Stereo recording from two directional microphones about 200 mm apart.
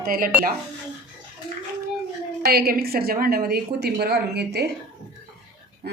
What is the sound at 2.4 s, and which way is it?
A woman's voice, 50° right (ahead or behind).